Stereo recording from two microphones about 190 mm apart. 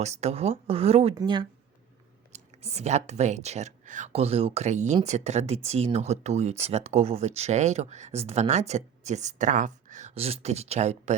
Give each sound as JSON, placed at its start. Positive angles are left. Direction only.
{"t": 0.0, "sound": "speech", "side_deg": -35}
{"t": 2.3, "sound": "speech", "side_deg": -35}